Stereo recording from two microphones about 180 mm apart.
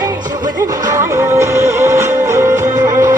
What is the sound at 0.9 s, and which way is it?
Music, 15° right (ahead or behind).